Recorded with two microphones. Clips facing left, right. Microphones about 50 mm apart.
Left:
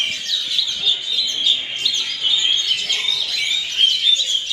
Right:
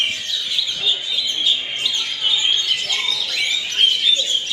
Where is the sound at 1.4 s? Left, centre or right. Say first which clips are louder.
Even; right.